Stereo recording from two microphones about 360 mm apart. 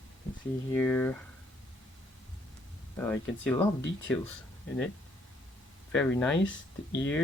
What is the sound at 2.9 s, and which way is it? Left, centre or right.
Speech, centre.